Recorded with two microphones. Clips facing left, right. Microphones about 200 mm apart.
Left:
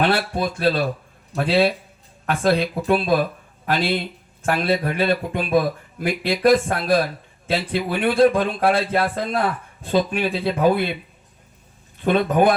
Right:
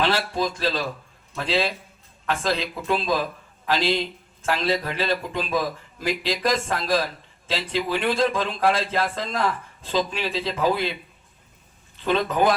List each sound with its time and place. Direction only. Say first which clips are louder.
0.0 s speech: left 3 dB; 55° left (ahead or behind)
12.0 s speech: left 4 dB; 55° left (ahead or behind)